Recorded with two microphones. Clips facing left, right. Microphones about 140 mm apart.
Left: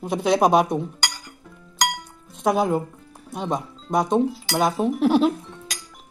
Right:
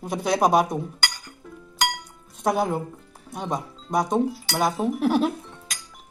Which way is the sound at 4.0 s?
20° left (ahead or behind).